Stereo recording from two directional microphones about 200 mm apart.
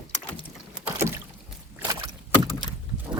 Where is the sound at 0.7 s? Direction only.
10° right (ahead or behind).